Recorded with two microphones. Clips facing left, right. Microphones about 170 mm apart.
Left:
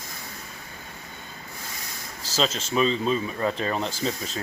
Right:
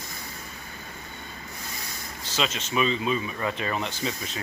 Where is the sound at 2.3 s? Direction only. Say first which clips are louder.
Left 3 dB; 30° left (ahead or behind).